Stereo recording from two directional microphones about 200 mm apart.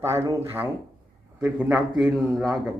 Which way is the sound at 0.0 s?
15° right (ahead or behind).